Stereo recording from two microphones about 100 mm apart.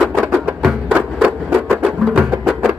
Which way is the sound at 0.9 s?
15° right (ahead or behind).